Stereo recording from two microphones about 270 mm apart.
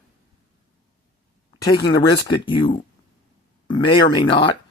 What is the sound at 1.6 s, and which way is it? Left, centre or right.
Speech, centre.